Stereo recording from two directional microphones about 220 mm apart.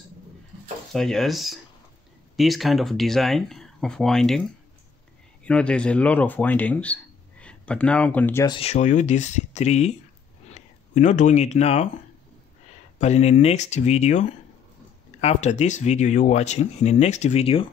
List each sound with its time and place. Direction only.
0.9 s speech: centre (ahead or behind)
5.4 s speech: 5° left (ahead or behind)
8.5 s speech: 30° left (ahead or behind)
13.0 s speech: 30° left (ahead or behind)